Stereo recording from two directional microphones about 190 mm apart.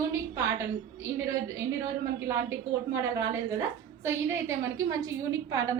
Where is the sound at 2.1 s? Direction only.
15° right (ahead or behind).